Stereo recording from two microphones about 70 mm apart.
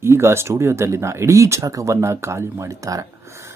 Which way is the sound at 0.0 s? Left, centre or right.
Right.